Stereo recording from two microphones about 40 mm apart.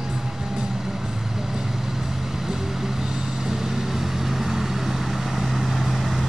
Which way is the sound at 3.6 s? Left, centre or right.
Centre.